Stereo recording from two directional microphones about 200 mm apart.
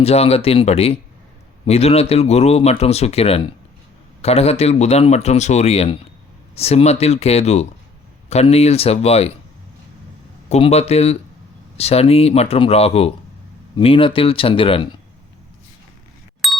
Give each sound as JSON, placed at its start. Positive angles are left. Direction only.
{"t": 0.0, "sound": "speech", "side_deg": 30}
{"t": 10.5, "sound": "speech", "side_deg": 30}
{"t": 16.4, "sound": "a sound", "side_deg": 0}